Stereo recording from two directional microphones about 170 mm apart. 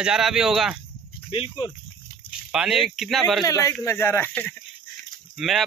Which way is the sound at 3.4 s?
15° left (ahead or behind).